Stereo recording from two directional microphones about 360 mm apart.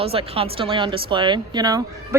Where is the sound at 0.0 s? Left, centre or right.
Centre.